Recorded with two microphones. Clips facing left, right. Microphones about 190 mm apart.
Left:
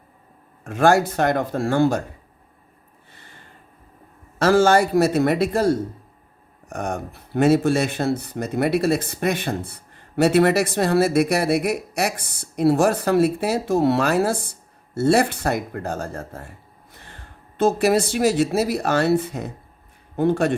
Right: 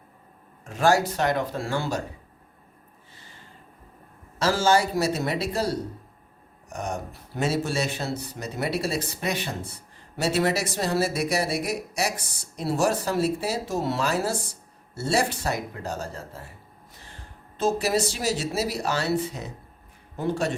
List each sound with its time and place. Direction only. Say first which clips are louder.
0.6 s speech: left 4 dB; 55° left (ahead or behind)
3.1 s snort: left 3 dB; 60° left (ahead or behind)
4.4 s speech: left 6 dB; 55° left (ahead or behind)
17.6 s speech: left 6 dB; 60° left (ahead or behind)